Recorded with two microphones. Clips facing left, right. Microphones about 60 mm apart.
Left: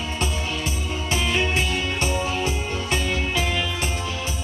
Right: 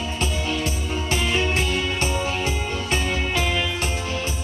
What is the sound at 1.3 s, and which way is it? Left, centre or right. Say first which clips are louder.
Music: even; right.